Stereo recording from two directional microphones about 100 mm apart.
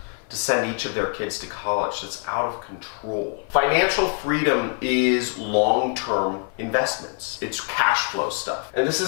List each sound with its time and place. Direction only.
0.4 s speech: 10° left (ahead or behind)